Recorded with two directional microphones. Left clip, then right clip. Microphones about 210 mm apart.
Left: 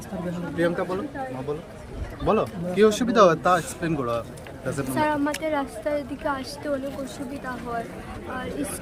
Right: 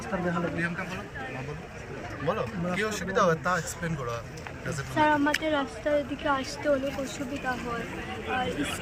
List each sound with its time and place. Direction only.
2.2 s speech: 50° left (ahead or behind)
4.9 s a woman's voice: 10° left (ahead or behind)